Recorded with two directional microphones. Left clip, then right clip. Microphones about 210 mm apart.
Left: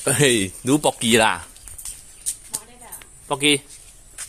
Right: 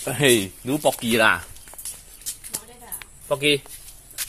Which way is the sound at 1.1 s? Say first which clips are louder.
Left 1 dB; 35° left (ahead or behind).